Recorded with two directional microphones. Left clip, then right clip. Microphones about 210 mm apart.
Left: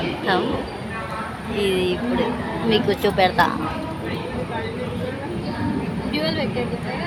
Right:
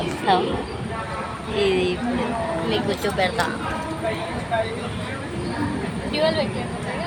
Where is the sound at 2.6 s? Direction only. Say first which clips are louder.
Left 4 dB; 25° left (ahead or behind).